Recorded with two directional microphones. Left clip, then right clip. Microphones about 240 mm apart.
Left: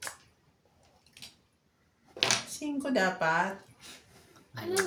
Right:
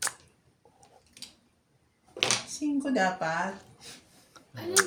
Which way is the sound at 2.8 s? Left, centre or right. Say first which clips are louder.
Even; left.